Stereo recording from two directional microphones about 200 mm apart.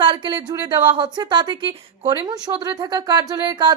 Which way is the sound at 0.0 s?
25° right (ahead or behind).